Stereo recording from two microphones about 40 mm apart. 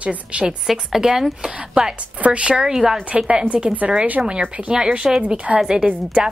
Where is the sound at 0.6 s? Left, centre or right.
Centre.